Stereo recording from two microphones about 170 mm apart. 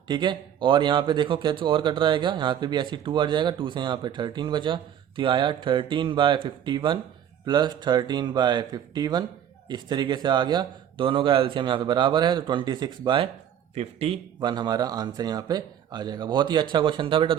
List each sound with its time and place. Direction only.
0.1 s speech: 25° right (ahead or behind)
13.7 s speech: 35° right (ahead or behind)
14.4 s speech: 25° right (ahead or behind)